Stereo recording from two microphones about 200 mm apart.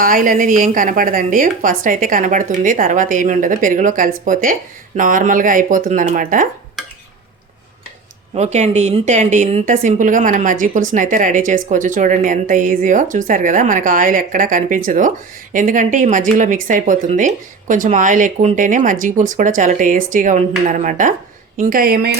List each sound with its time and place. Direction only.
0.0 s speech: 45° right (ahead or behind)
8.4 s speech: 35° right (ahead or behind)